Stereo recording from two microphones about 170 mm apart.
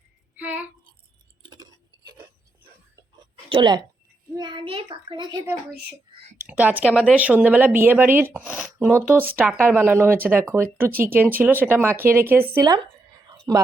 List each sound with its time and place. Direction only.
0.3 s a sound: 10° right (ahead or behind)
1.4 s a sound: 25° right (ahead or behind)
3.5 s speech: 25° right (ahead or behind)
4.4 s child singing: 25° right (ahead or behind)
4.9 s a woman's voice: 25° right (ahead or behind)
6.4 s a woman's voice: 10° right (ahead or behind)